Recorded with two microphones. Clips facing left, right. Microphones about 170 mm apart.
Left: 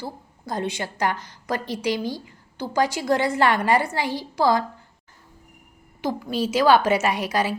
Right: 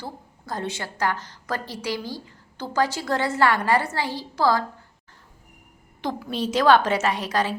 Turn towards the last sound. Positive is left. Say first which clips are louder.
# left 1 dB
turn(degrees=10)  # may be behind; listen again after turning